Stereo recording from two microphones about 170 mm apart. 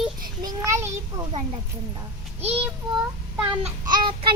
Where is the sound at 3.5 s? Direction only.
30° right (ahead or behind).